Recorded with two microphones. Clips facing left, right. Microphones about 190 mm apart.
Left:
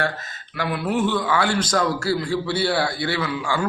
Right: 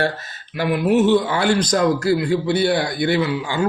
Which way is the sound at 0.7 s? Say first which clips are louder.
Right 7 dB; 20° right (ahead or behind).